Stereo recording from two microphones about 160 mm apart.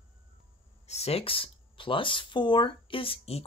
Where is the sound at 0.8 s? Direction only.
40° left (ahead or behind).